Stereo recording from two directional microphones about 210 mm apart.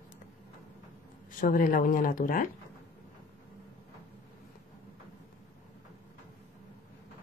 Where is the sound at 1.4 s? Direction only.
40° left (ahead or behind).